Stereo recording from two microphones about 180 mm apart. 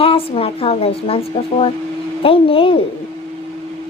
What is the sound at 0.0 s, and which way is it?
A woman's voice, 30° left (ahead or behind).